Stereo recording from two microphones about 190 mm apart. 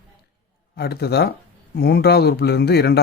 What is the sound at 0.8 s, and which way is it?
Speech, 55° left (ahead or behind).